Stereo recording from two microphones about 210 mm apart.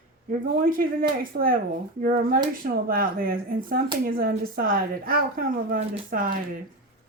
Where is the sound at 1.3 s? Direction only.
40° right (ahead or behind).